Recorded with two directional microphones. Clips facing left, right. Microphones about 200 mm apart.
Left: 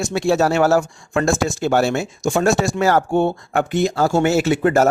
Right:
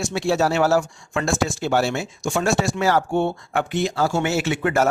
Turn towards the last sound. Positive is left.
turn(degrees=40)  # may be behind; listen again after turning